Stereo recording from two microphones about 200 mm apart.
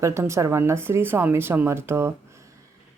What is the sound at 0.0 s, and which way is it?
Speech, 15° right (ahead or behind).